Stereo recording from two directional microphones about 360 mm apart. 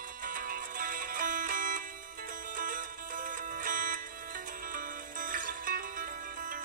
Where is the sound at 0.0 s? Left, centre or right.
Right.